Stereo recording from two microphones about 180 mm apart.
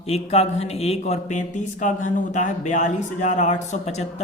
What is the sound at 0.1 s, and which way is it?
A man's voice, 35° left (ahead or behind).